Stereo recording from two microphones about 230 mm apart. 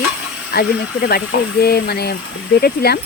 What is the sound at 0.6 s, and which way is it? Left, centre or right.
Speech, left.